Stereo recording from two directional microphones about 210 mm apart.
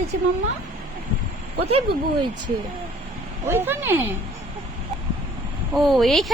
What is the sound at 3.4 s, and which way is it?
Speech, 10° right (ahead or behind).